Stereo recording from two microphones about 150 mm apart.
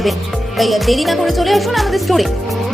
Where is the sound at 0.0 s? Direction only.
Centre (ahead or behind).